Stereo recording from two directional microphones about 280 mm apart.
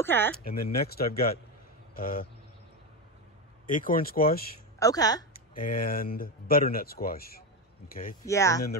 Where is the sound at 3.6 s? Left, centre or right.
Left.